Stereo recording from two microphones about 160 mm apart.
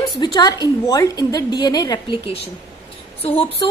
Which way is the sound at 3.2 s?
35° left (ahead or behind).